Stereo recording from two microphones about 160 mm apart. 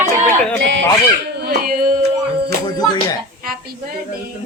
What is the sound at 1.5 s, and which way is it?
Singing, 60° right (ahead or behind).